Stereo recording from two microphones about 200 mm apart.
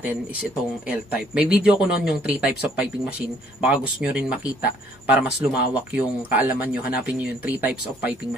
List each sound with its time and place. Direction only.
0.8 s speech: 5° right (ahead or behind)